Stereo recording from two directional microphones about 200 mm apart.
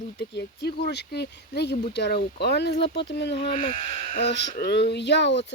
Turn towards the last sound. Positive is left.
turn(degrees=60)  # may be behind; listen again after turning